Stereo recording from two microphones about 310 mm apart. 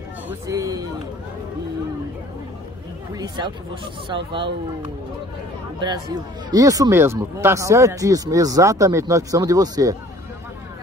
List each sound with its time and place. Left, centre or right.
0.5 s speech: centre
3.2 s speech: centre
6.5 s speech: centre